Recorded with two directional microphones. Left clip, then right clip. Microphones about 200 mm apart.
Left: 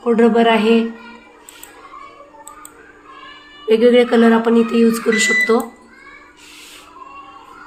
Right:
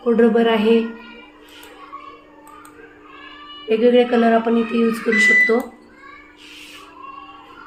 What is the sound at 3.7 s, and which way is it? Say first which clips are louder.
Speech: left 3 dB; 50° left (ahead or behind).